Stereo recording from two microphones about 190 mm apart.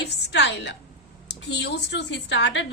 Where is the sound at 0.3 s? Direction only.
65° left (ahead or behind).